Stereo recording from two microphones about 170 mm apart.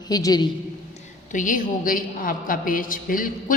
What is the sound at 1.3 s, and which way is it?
A woman's voice, 50° left (ahead or behind).